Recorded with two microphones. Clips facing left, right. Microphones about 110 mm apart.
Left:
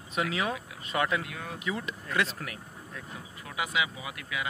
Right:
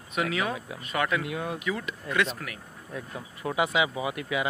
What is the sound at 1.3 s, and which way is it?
Speech, 20° right (ahead or behind).